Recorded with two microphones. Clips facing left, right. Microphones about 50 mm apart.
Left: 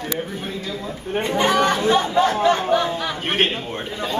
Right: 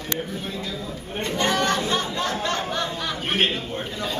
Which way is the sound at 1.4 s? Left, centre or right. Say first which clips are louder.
Left 4 dB; centre.